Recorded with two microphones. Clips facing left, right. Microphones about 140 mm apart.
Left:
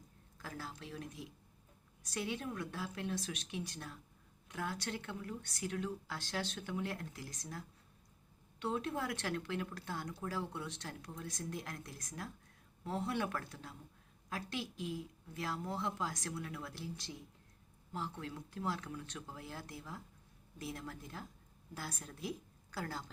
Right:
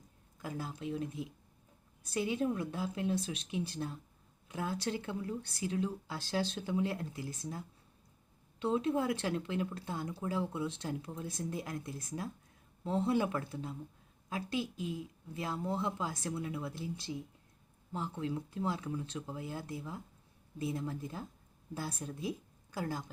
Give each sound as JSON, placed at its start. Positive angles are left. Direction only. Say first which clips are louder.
{"t": 0.4, "sound": "speech", "louder": "right 7 dB", "side_deg": -20}
{"t": 8.7, "sound": "a woman's voice", "louder": "right 7 dB", "side_deg": -25}